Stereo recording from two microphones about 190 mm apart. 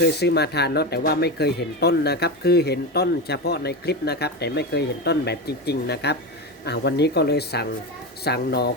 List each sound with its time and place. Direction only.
0.0 s speech: 60° left (ahead or behind)